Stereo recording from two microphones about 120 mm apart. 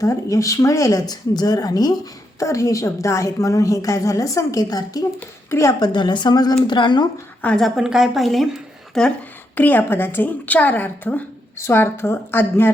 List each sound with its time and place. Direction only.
0.0 s a woman's voice: 25° left (ahead or behind)
5.8 s speech: 40° left (ahead or behind)
7.4 s speech: 5° left (ahead or behind)
9.6 s a woman's voice: 15° left (ahead or behind)